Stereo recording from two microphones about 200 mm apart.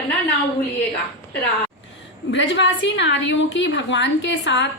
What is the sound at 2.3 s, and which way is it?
A woman's voice, 65° left (ahead or behind).